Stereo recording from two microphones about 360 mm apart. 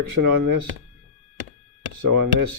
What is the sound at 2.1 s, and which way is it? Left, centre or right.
Speech, right.